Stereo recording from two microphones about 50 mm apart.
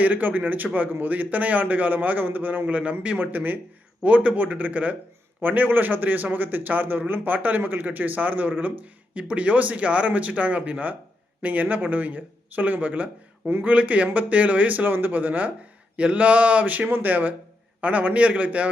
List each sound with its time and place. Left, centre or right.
0.0 s a man's voice: right
4.0 s a man's voice: right
16.0 s a man's voice: right